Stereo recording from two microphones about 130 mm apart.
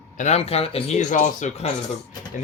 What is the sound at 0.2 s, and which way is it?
Speech, 55° left (ahead or behind).